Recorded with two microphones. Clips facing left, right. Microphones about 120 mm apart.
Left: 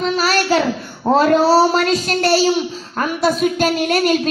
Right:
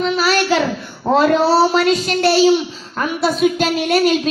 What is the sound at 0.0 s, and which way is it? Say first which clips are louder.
Child singing: right 1 dB; 40° left (ahead or behind).